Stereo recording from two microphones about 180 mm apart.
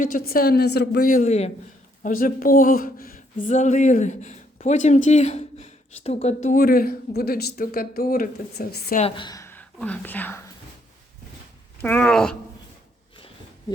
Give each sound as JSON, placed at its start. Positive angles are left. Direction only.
{"t": 0.0, "sound": "a woman's voice", "side_deg": 55}
{"t": 2.0, "sound": "a man's voice", "side_deg": 50}
{"t": 3.4, "sound": "a man's voice", "side_deg": 45}
{"t": 9.0, "sound": "a woman's voice", "side_deg": 30}
{"t": 11.8, "sound": "speech", "side_deg": 10}
{"t": 13.1, "sound": "a sound", "side_deg": 30}